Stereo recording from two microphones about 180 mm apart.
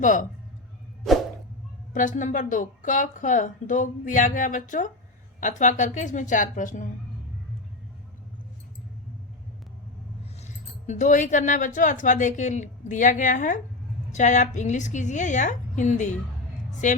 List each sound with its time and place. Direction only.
0.0 s speech: 45° left (ahead or behind)
1.9 s speech: 45° left (ahead or behind)
10.4 s speech: 40° left (ahead or behind)